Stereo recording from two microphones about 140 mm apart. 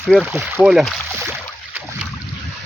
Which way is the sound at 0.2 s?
10° right (ahead or behind).